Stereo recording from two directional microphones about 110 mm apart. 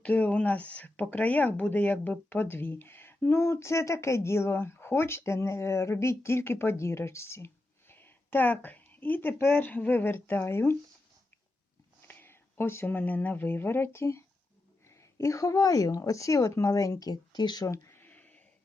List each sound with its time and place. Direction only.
0.0 s speech: 10° left (ahead or behind)
12.0 s speech: 20° left (ahead or behind); by 17.7 s 40° left (ahead or behind)
17.7 s a sound: 25° left (ahead or behind)